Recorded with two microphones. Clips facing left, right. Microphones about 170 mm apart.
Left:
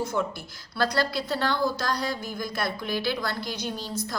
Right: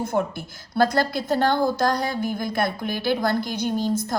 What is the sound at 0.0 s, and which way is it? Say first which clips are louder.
A woman's voice: right 4 dB; 55° right (ahead or behind).